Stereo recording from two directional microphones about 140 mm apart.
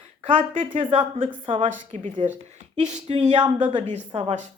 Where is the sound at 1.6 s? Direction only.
60° right (ahead or behind).